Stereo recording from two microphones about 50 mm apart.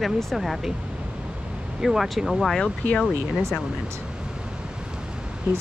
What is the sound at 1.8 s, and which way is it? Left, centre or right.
Speech, centre.